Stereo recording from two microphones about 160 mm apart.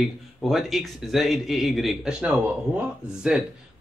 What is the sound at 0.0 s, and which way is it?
A man's voice, centre (ahead or behind).